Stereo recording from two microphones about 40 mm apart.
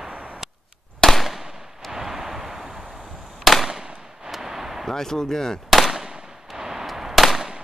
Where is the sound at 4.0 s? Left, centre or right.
Centre.